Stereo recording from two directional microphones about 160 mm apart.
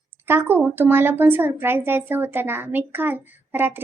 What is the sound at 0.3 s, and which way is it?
A woman's voice, 15° right (ahead or behind).